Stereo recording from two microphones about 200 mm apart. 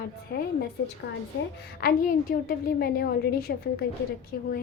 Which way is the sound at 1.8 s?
45° left (ahead or behind).